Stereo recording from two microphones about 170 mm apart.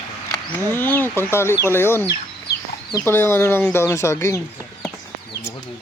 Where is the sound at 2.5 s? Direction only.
70° left (ahead or behind).